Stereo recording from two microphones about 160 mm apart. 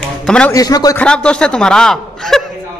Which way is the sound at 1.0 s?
5° left (ahead or behind).